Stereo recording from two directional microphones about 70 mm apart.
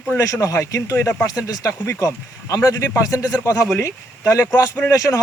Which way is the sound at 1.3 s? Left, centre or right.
Left.